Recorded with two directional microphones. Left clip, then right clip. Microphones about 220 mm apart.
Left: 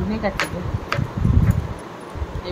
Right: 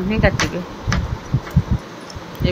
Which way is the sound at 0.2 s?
10° right (ahead or behind).